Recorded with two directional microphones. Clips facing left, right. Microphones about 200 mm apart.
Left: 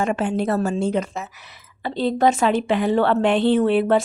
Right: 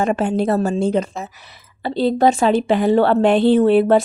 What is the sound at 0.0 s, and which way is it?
A woman's voice, 35° right (ahead or behind).